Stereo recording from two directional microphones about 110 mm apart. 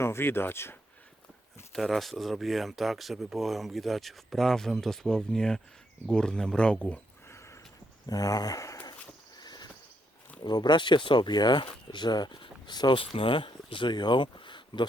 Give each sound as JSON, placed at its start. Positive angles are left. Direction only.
{"t": 0.0, "sound": "speech", "side_deg": 20}
{"t": 1.7, "sound": "speech", "side_deg": 0}
{"t": 7.3, "sound": "a sound", "side_deg": 25}
{"t": 8.0, "sound": "speech", "side_deg": 35}
{"t": 9.4, "sound": "a sound", "side_deg": 40}
{"t": 10.4, "sound": "speech", "side_deg": 40}